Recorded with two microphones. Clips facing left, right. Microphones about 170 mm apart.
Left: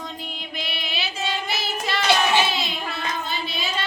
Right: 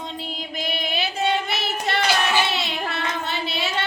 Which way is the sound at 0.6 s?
45° right (ahead or behind).